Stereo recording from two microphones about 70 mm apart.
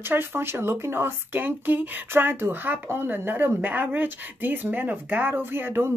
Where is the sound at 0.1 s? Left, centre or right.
Right.